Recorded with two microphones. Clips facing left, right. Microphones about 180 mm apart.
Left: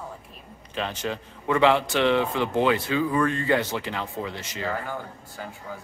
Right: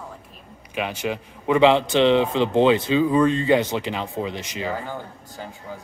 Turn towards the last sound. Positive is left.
turn(degrees=-25)  # may be behind; listen again after turning